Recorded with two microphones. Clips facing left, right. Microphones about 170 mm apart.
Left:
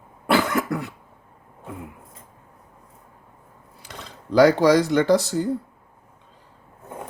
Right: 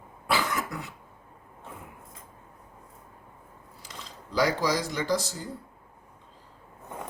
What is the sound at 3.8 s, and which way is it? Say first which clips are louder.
Speech: left 5 dB; 65° left (ahead or behind).